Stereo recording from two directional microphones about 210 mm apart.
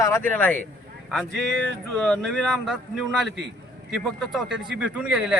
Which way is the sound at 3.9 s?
Centre (ahead or behind).